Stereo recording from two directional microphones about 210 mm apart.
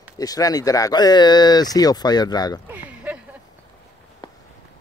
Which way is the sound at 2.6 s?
5° right (ahead or behind).